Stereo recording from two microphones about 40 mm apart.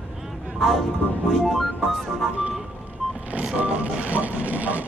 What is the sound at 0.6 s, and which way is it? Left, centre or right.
Speech, centre.